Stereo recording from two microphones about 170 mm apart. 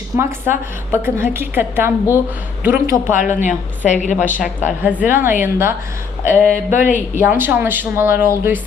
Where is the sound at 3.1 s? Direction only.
50° left (ahead or behind).